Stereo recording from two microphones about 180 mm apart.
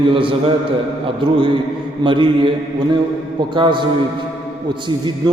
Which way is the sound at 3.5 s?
25° right (ahead or behind).